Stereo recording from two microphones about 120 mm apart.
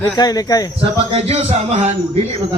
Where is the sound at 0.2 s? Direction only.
30° left (ahead or behind).